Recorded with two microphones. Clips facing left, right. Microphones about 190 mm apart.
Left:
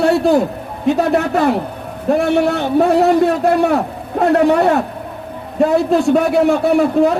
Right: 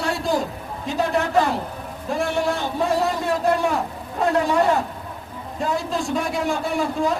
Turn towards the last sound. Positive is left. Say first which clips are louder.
# left 10 dB
turn(degrees=65)  # may be behind; listen again after turning